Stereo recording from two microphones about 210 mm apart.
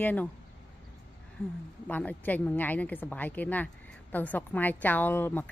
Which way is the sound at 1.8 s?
5° left (ahead or behind).